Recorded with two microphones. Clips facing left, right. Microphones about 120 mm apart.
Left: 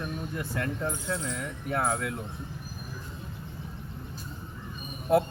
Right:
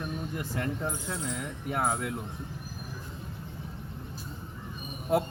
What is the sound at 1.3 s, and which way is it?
Speech, 15° right (ahead or behind).